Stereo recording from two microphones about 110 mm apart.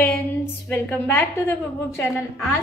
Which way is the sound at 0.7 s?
20° left (ahead or behind).